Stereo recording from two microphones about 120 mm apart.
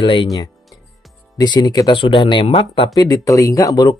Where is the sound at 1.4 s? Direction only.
35° left (ahead or behind); by 2.9 s 50° left (ahead or behind).